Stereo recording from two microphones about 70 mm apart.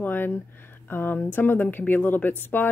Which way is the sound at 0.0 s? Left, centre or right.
Left.